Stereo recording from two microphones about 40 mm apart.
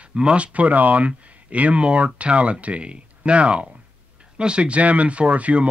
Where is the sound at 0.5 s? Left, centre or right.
Right.